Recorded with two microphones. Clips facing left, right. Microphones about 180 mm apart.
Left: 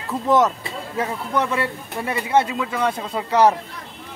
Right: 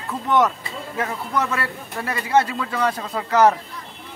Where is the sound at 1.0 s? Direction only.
25° left (ahead or behind).